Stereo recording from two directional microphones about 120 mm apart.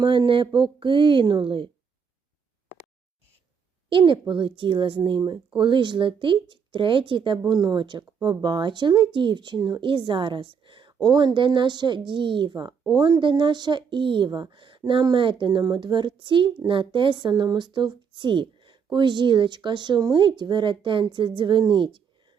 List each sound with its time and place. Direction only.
0.0 s speech: 40° right (ahead or behind)
3.8 s speech: 45° right (ahead or behind)